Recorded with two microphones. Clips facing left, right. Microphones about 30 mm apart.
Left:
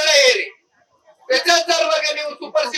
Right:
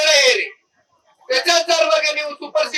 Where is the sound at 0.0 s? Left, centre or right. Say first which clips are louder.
Even; centre.